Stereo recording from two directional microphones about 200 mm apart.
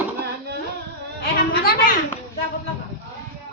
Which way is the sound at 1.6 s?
50° left (ahead or behind).